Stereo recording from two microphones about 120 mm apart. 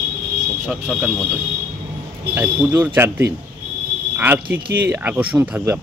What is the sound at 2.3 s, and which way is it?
Speech, 15° right (ahead or behind).